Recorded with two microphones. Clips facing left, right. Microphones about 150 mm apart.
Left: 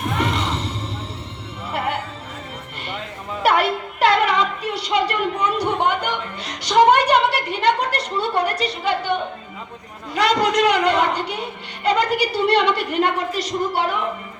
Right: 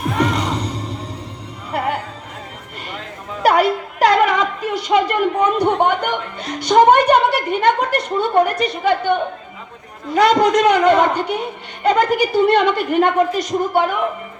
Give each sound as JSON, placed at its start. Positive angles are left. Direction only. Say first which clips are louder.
{"t": 0.2, "sound": "music", "louder": "right 6 dB", "side_deg": -40}
{"t": 3.4, "sound": "music", "louder": "right 4 dB", "side_deg": -40}
{"t": 10.2, "sound": "a woman's voice", "louder": "right 5 dB", "side_deg": -50}